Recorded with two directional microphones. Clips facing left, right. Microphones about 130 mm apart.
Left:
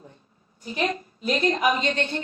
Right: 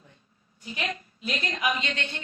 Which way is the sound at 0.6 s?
40° left (ahead or behind).